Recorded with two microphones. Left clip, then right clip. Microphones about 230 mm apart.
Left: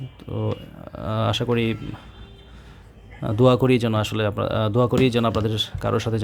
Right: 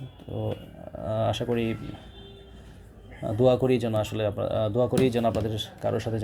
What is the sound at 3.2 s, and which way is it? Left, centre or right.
Speech, left.